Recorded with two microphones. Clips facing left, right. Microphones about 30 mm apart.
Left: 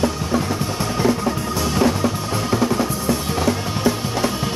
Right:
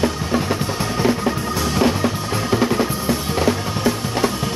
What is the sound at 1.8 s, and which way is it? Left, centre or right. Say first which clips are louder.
Music: even; centre.